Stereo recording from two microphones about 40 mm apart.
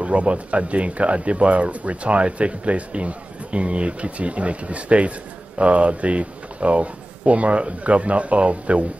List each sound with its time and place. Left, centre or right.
0.0 s speech: right